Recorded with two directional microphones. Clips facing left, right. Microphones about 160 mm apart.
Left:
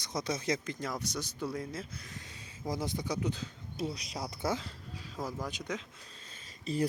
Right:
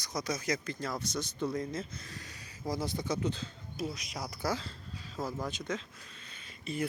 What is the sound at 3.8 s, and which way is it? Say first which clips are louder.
Speech: left 1 dB; 30° left (ahead or behind).